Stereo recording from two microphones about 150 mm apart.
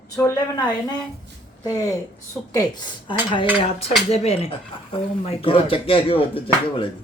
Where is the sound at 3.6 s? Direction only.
40° left (ahead or behind).